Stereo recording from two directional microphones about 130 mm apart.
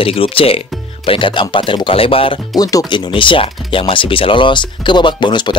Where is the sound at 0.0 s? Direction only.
45° left (ahead or behind).